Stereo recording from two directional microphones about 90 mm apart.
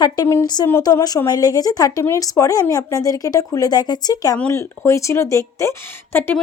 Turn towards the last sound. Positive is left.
turn(degrees=25)  # may be behind; listen again after turning